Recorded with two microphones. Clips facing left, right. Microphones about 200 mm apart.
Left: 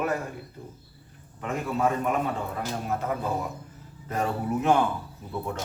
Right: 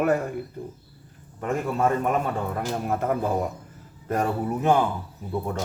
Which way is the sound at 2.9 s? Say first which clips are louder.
Right 4 dB; 50° right (ahead or behind).